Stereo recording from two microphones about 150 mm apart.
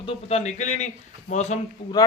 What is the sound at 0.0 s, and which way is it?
A man's voice, 40° left (ahead or behind).